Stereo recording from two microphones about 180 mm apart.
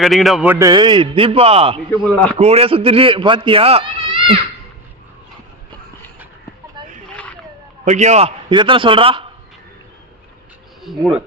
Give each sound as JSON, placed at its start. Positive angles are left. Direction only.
{"t": 0.0, "sound": "a man's voice", "side_deg": 0}
{"t": 0.5, "sound": "speech", "side_deg": -20}
{"t": 2.0, "sound": "speech", "side_deg": 5}
{"t": 2.4, "sound": "speech", "side_deg": -35}
{"t": 6.8, "sound": "a sound", "side_deg": -25}
{"t": 7.9, "sound": "a man's voice", "side_deg": -40}
{"t": 8.4, "sound": "speech", "side_deg": -25}
{"t": 10.8, "sound": "a man's voice", "side_deg": 0}